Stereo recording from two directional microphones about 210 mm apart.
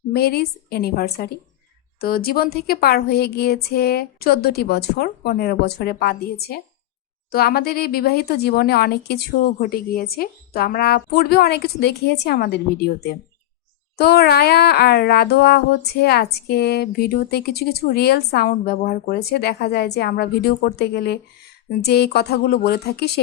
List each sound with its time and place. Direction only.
0.1 s speech: 50° left (ahead or behind)